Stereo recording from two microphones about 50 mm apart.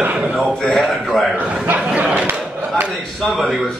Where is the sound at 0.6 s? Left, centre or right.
Centre.